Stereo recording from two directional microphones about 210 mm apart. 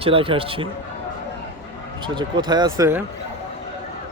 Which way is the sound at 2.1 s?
20° right (ahead or behind).